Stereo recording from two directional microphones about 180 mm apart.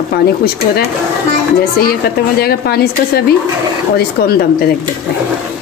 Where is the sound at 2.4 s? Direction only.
60° left (ahead or behind).